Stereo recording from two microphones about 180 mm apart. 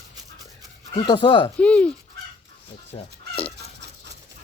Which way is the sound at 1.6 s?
5° left (ahead or behind).